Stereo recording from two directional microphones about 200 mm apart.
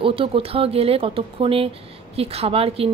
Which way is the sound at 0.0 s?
25° right (ahead or behind).